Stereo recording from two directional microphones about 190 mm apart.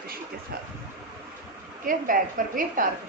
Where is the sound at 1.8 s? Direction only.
45° right (ahead or behind).